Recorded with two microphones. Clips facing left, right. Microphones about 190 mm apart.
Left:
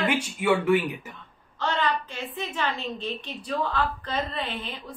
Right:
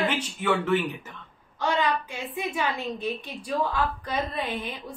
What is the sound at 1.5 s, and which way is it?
A woman's voice, 10° right (ahead or behind).